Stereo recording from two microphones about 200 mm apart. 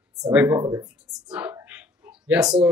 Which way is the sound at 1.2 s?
5° right (ahead or behind).